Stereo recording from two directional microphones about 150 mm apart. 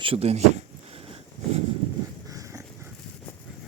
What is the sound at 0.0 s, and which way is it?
Speech, 40° right (ahead or behind).